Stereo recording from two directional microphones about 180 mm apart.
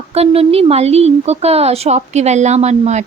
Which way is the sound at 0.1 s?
35° right (ahead or behind).